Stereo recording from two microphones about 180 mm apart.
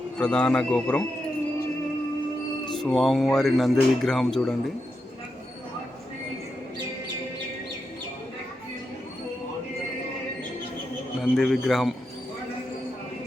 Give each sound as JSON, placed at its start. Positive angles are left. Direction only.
{"t": 0.2, "sound": "speech", "side_deg": 5}
{"t": 2.8, "sound": "speech", "side_deg": 0}
{"t": 11.2, "sound": "speech", "side_deg": 0}